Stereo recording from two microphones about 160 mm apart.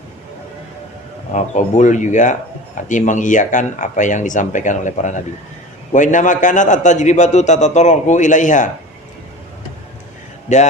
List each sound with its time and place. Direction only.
1.3 s a man's voice: 50° left (ahead or behind)
10.5 s a man's voice: 50° left (ahead or behind)